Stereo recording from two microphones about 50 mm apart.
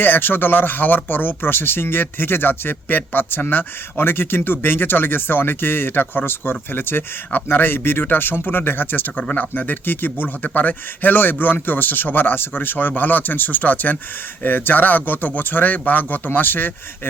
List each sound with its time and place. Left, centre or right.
0.0 s speech: left